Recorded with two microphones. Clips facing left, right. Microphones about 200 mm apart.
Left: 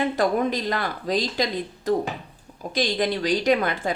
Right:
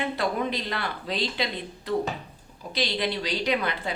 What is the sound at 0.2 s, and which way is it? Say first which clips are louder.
Speech: left 5 dB; 45° left (ahead or behind).